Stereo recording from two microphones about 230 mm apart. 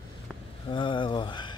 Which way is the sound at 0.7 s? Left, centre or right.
Left.